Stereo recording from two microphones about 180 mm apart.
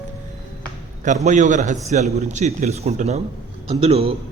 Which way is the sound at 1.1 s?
45° right (ahead or behind).